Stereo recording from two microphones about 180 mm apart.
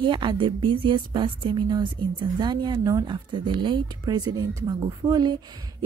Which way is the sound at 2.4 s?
25° right (ahead or behind).